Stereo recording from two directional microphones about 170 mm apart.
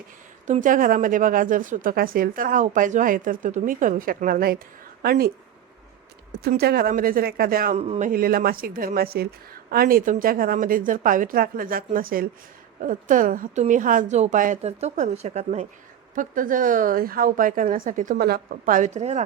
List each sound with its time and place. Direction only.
0.4 s a woman's voice: 45° right (ahead or behind); by 5.3 s 65° right (ahead or behind)
6.3 s a woman's voice: 65° right (ahead or behind)
7.8 s a woman's voice: 40° right (ahead or behind)